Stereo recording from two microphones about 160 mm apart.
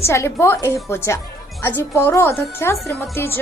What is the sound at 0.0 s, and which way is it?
A woman's voice, 15° left (ahead or behind).